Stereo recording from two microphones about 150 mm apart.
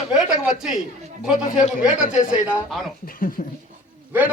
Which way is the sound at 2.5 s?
Centre (ahead or behind).